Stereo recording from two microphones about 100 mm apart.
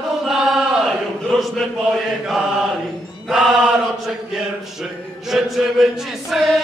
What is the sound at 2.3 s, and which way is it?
Chant, 5° right (ahead or behind).